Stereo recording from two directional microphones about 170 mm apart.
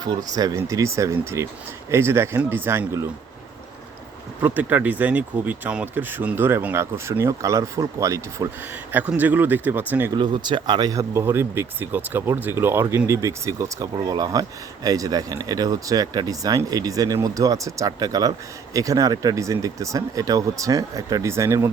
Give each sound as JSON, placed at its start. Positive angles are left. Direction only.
{"t": 0.0, "sound": "speech", "side_deg": -20}
{"t": 4.4, "sound": "speech", "side_deg": -10}
{"t": 10.2, "sound": "speech", "side_deg": -25}